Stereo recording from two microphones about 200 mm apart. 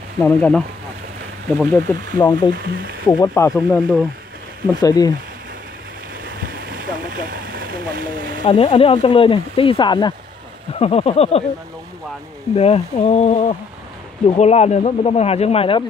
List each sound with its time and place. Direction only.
0.2 s speech: 5° left (ahead or behind)
2.5 s speech: 50° right (ahead or behind)
3.1 s speech: 15° left (ahead or behind)
4.6 s speech: 20° left (ahead or behind)
6.2 s boat: 45° right (ahead or behind)
7.2 s speech: 45° right (ahead or behind)
8.5 s speech: 25° left (ahead or behind)
12.5 s speech: 30° left (ahead or behind)